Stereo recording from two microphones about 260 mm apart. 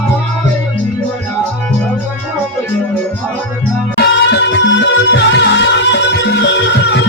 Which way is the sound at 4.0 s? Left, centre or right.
Left.